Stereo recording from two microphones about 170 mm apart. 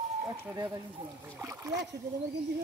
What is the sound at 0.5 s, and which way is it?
Speech, 20° right (ahead or behind).